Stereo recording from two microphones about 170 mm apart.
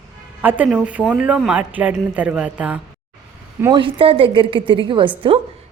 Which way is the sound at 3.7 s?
30° right (ahead or behind).